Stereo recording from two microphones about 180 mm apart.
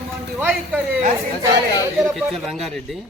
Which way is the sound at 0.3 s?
5° right (ahead or behind).